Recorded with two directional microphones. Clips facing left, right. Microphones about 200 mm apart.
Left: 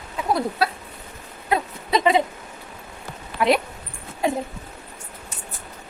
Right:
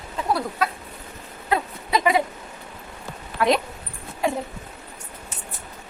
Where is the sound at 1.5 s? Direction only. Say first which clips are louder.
Left 1 dB; 25° left (ahead or behind).